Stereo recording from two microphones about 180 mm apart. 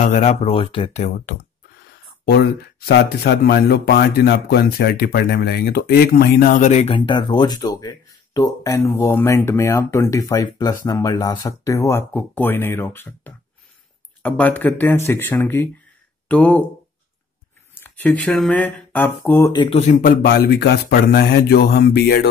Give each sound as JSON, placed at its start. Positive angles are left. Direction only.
{"t": 0.0, "sound": "speech", "side_deg": 40}
{"t": 2.2, "sound": "speech", "side_deg": 60}
{"t": 7.0, "sound": "speech", "side_deg": 25}
{"t": 17.7, "sound": "speech", "side_deg": 10}
{"t": 19.5, "sound": "speech", "side_deg": 25}
{"t": 19.8, "sound": "speech", "side_deg": 45}